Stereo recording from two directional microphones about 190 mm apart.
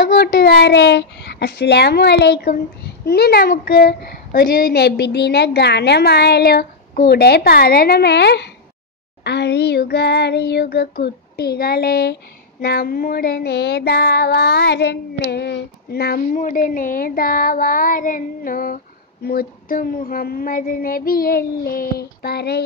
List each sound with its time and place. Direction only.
0.0 s a child's voice: 55° left (ahead or behind)
12.6 s child singing: 55° left (ahead or behind)